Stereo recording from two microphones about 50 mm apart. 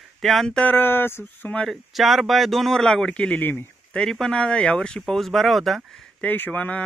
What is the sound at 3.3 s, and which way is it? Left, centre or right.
Speech, left.